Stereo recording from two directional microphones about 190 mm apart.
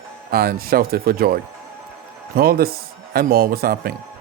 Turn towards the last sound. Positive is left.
turn(degrees=-50)  # may be behind; listen again after turning